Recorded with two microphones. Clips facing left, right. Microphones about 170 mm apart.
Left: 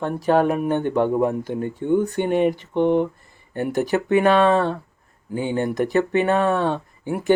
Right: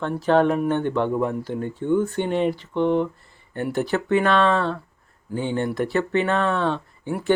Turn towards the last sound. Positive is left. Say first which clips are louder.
# left 2 dB
turn(degrees=15)  # may be behind; listen again after turning